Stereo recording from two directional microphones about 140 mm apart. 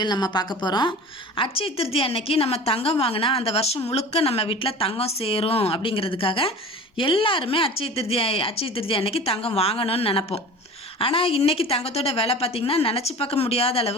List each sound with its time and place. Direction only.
0.0 s a woman's voice: 30° left (ahead or behind); by 13.9 s 45° left (ahead or behind)